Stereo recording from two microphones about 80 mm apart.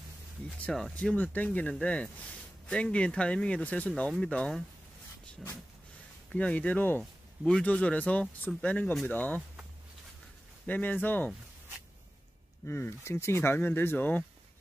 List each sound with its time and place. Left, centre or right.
0.7 s speech: centre
1.1 s speech: centre
6.3 s speech: centre
7.0 s speech: centre
10.7 s speech: left
12.6 s speech: left